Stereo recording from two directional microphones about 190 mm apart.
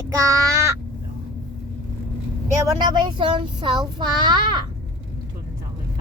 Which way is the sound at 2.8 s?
25° right (ahead or behind).